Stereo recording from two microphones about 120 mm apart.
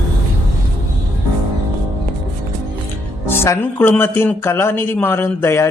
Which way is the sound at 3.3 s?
20° left (ahead or behind).